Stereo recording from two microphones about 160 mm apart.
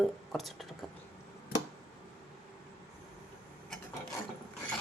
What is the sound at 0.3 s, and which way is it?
Speech, centre (ahead or behind).